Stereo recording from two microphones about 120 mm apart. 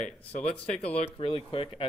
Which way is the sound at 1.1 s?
50° left (ahead or behind).